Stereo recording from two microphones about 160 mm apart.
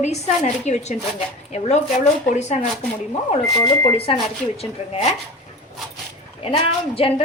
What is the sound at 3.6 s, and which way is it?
A woman's voice, 30° left (ahead or behind).